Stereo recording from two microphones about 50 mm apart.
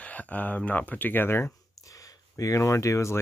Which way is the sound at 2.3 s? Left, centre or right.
Left.